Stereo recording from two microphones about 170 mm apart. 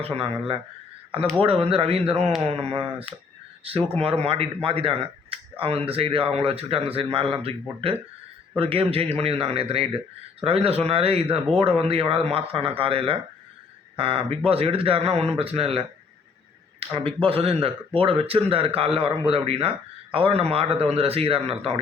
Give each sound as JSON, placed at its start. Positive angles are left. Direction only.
{"t": 0.0, "sound": "speech", "side_deg": -30}